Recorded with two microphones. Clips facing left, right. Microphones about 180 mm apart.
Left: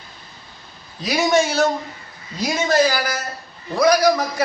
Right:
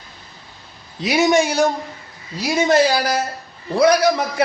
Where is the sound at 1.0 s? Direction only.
15° right (ahead or behind).